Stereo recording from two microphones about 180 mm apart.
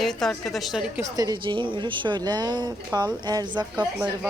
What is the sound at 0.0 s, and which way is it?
Speech, centre (ahead or behind).